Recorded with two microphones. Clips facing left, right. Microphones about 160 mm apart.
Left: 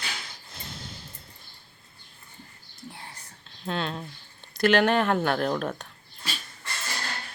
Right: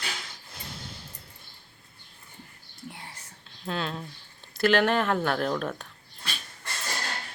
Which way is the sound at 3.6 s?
Centre (ahead or behind).